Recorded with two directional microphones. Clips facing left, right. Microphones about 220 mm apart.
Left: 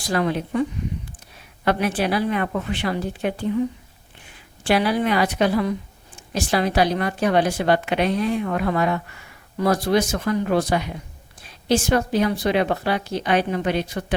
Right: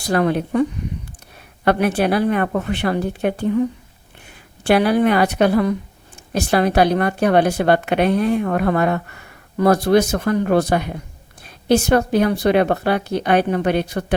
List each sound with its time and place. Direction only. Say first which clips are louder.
0.0 s speech: right 4 dB; 55° right (ahead or behind)
1.6 s a woman's voice: right 4 dB; 60° right (ahead or behind)
4.6 s speech: right 5 dB; 55° right (ahead or behind)